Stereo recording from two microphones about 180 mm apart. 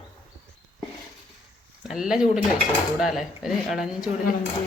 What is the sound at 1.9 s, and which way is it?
Speech, 5° right (ahead or behind).